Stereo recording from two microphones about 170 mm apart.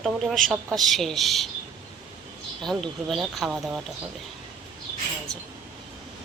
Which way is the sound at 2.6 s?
Centre (ahead or behind).